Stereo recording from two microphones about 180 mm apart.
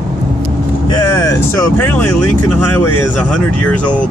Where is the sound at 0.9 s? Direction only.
20° left (ahead or behind).